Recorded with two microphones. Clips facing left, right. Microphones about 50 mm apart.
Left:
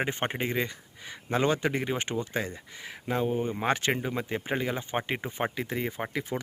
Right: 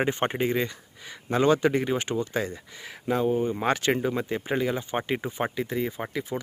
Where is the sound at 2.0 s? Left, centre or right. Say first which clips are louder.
Right 3 dB; left.